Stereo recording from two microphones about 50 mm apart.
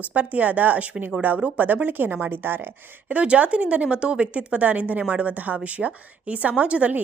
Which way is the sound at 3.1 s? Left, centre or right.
Right.